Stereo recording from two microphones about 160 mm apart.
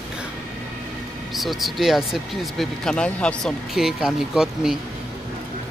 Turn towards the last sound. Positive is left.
turn(degrees=-5)  # may be behind; listen again after turning